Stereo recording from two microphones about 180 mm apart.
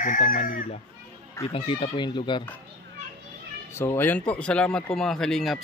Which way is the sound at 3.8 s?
10° left (ahead or behind).